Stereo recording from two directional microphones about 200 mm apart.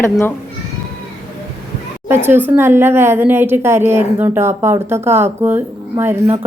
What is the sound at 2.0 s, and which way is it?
Speech, 10° right (ahead or behind).